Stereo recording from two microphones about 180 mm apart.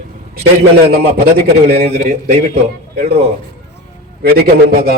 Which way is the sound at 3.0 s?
35° right (ahead or behind).